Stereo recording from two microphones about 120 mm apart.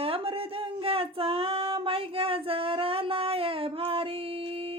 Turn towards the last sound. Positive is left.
turn(degrees=-50)  # may be behind; listen again after turning